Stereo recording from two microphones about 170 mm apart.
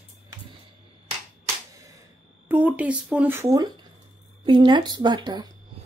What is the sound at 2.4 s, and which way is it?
Speech, 10° right (ahead or behind).